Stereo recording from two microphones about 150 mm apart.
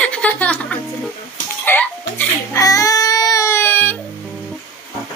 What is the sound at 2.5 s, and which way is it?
Baby cry, 20° left (ahead or behind).